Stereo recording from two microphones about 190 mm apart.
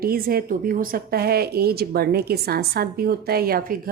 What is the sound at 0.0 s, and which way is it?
A woman's voice, 50° right (ahead or behind).